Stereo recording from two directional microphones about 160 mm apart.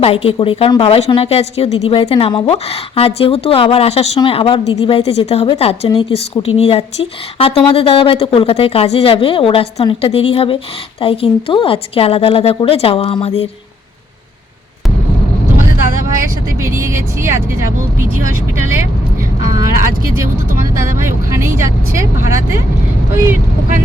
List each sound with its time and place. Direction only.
0.0 s a woman's voice: 40° left (ahead or behind)
16.6 s speech: 15° right (ahead or behind)
20.7 s speech: 15° right (ahead or behind)